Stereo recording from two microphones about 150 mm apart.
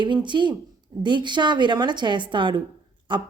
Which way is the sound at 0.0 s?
30° right (ahead or behind).